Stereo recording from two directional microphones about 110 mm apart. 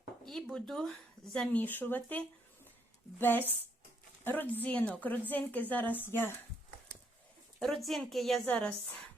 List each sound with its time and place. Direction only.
0.3 s speech: 5° left (ahead or behind); by 6.3 s 20° left (ahead or behind)
7.6 s speech: 5° left (ahead or behind)
8.4 s speech: 10° left (ahead or behind)